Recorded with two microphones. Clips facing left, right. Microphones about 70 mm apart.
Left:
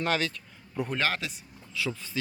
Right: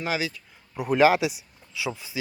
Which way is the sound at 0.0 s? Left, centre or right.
Centre.